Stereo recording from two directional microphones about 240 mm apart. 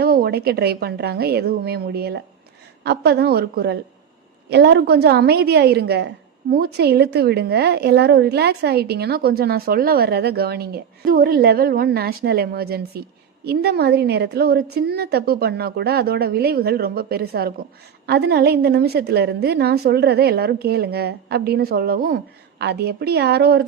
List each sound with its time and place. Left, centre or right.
0.0 s a woman's voice: right